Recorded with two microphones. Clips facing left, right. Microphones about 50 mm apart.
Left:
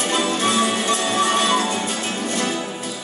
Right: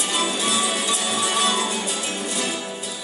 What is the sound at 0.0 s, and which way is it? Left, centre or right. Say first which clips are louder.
Music: left 4 dB; left.